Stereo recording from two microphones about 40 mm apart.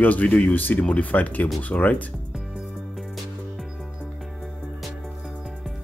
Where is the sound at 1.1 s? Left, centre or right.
Left.